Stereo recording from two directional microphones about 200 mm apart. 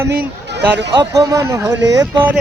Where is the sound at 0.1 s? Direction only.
55° right (ahead or behind).